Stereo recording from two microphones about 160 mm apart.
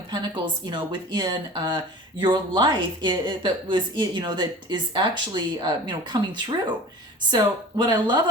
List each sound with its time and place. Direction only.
0.1 s a woman's voice: 25° right (ahead or behind)